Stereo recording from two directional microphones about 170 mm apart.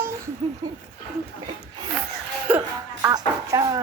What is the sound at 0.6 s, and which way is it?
Speech, 25° right (ahead or behind).